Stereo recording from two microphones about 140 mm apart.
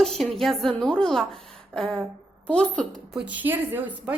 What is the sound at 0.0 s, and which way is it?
A woman's voice, centre (ahead or behind).